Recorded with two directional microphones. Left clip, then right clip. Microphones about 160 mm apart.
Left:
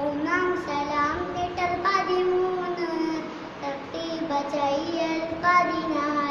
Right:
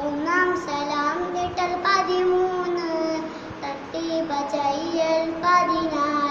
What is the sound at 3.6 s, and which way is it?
Child singing, 20° right (ahead or behind).